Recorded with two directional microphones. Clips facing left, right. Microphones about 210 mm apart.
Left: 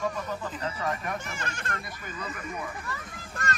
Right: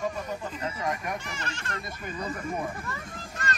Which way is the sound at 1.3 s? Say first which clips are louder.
Even; 55° left (ahead or behind).